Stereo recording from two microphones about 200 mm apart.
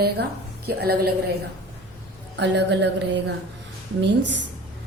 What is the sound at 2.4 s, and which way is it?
Speech, 60° right (ahead or behind).